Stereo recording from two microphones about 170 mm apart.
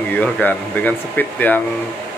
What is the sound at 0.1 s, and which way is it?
Speech, 10° left (ahead or behind).